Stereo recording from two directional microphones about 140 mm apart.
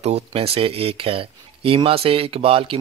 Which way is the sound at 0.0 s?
45° right (ahead or behind).